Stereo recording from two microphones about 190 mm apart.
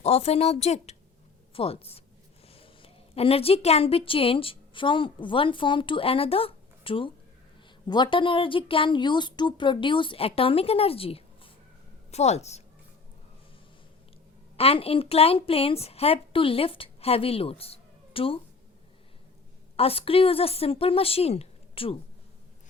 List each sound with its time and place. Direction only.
0.0 s a woman's voice: 35° left (ahead or behind)
14.5 s a woman's voice: 30° left (ahead or behind)
19.7 s a woman's voice: 30° left (ahead or behind)